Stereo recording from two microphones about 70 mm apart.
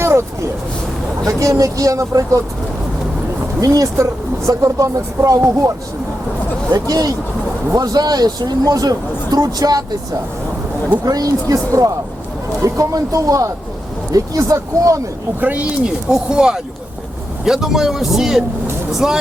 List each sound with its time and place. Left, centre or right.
0.0 s vehicle: right
1.2 s speech: right
3.6 s speech: right
6.7 s speech: right
11.0 s speech: right
15.4 s speech: right
16.0 s speech: centre